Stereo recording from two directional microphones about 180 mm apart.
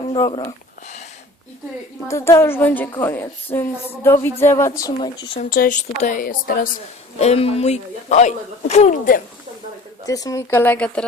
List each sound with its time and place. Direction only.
0.0 s speech: 25° left (ahead or behind)
2.0 s speech: 15° left (ahead or behind)
5.4 s speech: 50° left (ahead or behind)
7.2 s a man's voice: 35° left (ahead or behind)
10.1 s speech: 20° left (ahead or behind)